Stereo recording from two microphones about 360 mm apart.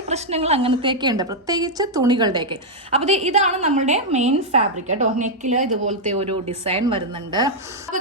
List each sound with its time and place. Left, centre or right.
0.1 s a woman's voice: centre